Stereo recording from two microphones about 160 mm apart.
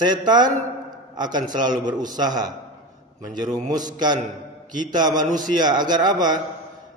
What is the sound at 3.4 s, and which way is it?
Speech, 50° right (ahead or behind).